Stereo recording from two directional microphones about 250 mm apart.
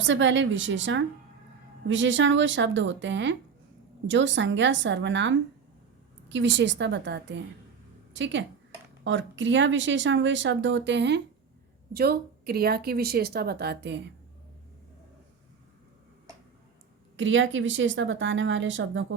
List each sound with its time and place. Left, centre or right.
0.0 s speech: right
17.2 s speech: right